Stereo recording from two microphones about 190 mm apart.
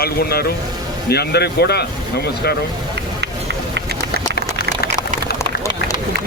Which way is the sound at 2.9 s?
65° right (ahead or behind).